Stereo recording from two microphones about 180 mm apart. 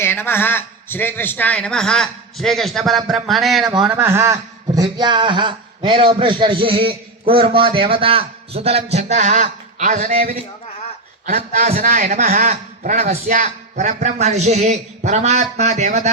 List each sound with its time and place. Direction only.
0.0 s a man's voice: 10° left (ahead or behind); by 10.3 s 45° right (ahead or behind)
11.3 s a man's voice: 45° right (ahead or behind)